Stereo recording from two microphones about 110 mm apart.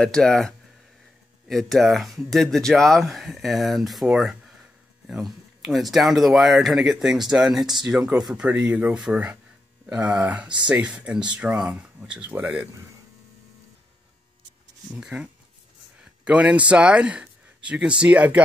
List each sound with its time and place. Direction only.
0.0 s speech: 5° left (ahead or behind); by 12.6 s 15° right (ahead or behind)
14.9 s speech: 10° right (ahead or behind)